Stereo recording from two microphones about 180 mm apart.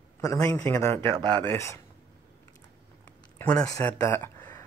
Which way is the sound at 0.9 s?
25° right (ahead or behind).